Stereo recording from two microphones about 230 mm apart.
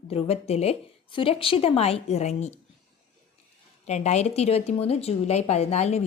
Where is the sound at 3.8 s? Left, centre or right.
Left.